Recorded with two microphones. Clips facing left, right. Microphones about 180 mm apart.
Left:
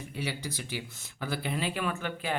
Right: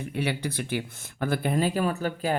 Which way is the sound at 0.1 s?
60° right (ahead or behind).